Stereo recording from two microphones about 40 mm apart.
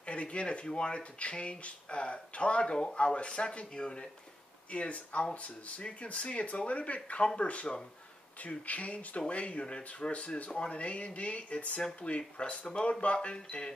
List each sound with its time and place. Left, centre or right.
0.0 s speech: left
4.6 s speech: left